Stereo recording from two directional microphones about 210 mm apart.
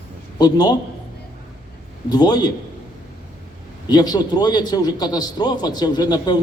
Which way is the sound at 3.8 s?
20° left (ahead or behind).